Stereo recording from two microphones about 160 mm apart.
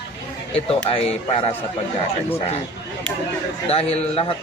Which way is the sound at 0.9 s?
35° left (ahead or behind).